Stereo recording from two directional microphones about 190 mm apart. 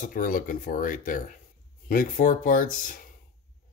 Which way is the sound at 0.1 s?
45° left (ahead or behind).